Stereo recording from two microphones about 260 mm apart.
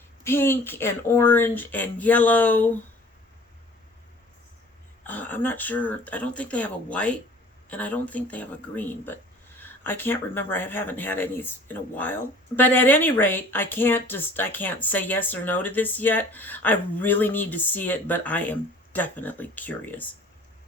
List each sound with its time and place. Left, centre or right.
0.3 s speech: centre
5.0 s speech: centre